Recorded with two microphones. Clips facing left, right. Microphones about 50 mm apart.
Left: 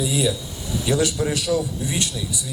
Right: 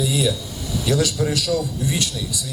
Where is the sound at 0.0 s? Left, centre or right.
Centre.